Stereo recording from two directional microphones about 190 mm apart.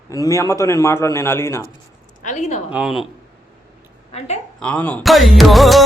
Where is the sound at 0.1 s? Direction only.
15° left (ahead or behind).